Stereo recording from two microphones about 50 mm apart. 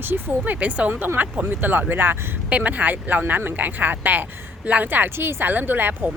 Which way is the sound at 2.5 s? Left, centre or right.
Right.